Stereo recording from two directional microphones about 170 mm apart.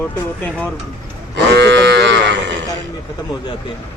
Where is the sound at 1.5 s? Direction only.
90° right.